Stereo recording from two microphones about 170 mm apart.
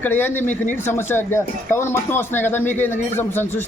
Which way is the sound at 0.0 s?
10° left (ahead or behind).